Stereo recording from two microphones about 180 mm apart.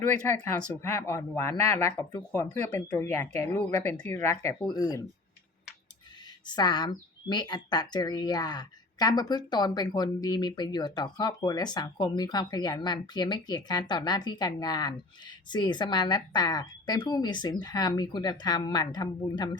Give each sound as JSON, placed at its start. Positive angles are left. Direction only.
{"t": 0.3, "sound": "speech", "side_deg": 10}
{"t": 6.4, "sound": "speech", "side_deg": 25}